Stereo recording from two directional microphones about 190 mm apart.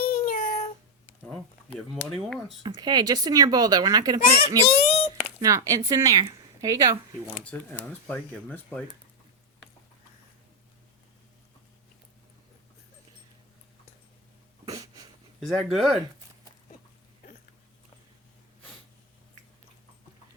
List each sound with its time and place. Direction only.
0.0 s meow: 50° left (ahead or behind)
1.3 s speech: 5° left (ahead or behind)
2.6 s speech: 20° right (ahead or behind)
4.6 s a sound: 30° left (ahead or behind)
5.4 s a woman's voice: 15° right (ahead or behind)
7.8 s speech: 5° left (ahead or behind)
14.6 s a sound: 20° right (ahead or behind)
15.4 s speech: centre (ahead or behind)